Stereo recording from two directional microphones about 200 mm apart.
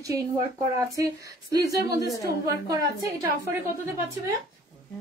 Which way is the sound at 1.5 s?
15° right (ahead or behind).